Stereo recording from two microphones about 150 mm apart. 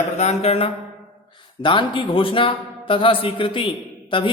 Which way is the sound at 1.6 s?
35° left (ahead or behind).